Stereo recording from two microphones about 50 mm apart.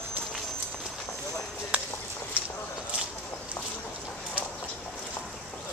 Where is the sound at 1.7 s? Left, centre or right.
Right.